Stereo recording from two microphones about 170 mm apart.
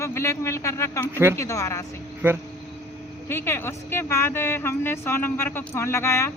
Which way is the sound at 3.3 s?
15° left (ahead or behind).